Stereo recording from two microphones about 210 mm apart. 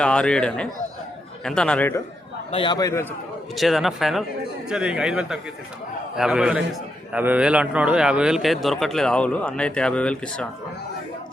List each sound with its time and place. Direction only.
0.0 s a man's voice: 5° left (ahead or behind)
2.5 s a man's voice: 25° left (ahead or behind)
3.6 s a man's voice: centre (ahead or behind)